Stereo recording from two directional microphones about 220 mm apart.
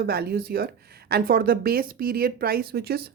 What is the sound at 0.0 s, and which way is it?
Speech, 45° right (ahead or behind).